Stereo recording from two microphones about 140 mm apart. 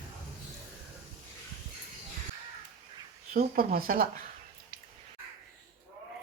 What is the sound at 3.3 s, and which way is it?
Speech, 90° right.